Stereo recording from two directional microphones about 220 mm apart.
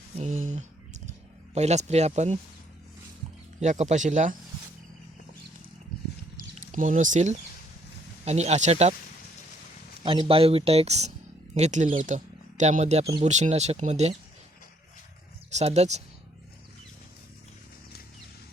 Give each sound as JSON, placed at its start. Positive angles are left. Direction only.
{"t": 0.2, "sound": "a sound", "side_deg": -30}
{"t": 1.5, "sound": "speech", "side_deg": -30}
{"t": 3.6, "sound": "speech", "side_deg": -30}
{"t": 6.7, "sound": "a man's voice", "side_deg": -35}
{"t": 10.0, "sound": "a man's voice", "side_deg": -20}
{"t": 15.4, "sound": "speech", "side_deg": -30}